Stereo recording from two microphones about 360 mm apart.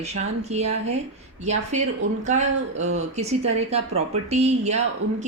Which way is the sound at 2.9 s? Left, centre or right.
Centre.